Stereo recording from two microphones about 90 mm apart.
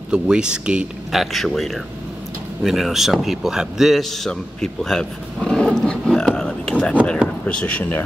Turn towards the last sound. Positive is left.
turn(degrees=15)  # may be behind; listen again after turning